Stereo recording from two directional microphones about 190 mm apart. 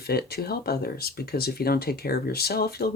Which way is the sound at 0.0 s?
55° left (ahead or behind).